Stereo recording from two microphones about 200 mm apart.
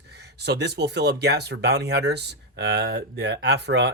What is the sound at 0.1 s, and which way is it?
Speech, 55° right (ahead or behind).